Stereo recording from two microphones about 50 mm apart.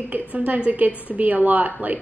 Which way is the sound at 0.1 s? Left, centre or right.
Right.